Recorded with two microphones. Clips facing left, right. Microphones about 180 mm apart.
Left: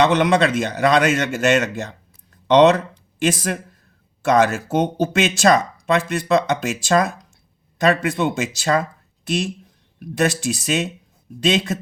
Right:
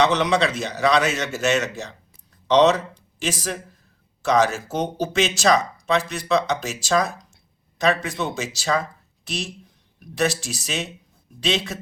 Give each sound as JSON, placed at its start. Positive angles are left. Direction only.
{"t": 0.0, "sound": "speech", "side_deg": 55}